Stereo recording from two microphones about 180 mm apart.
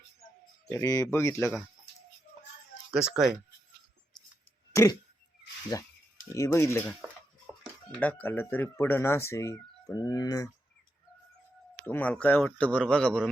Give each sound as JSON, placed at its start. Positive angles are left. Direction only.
{"t": 0.7, "sound": "speech", "side_deg": 20}
{"t": 2.9, "sound": "speech", "side_deg": -5}
{"t": 4.7, "sound": "a sound", "side_deg": 15}
{"t": 5.7, "sound": "speech", "side_deg": 20}
{"t": 11.9, "sound": "speech", "side_deg": 10}